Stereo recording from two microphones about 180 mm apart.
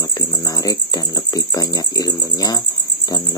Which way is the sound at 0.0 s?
20° left (ahead or behind).